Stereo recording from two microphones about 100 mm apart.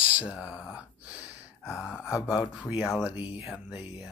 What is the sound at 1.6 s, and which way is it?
Speech, 30° left (ahead or behind).